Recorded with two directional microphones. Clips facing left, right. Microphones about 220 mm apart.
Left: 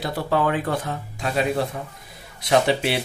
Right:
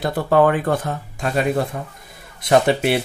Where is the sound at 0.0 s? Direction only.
50° right (ahead or behind).